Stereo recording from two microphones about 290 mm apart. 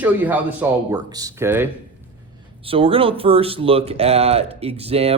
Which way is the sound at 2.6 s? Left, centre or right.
Centre.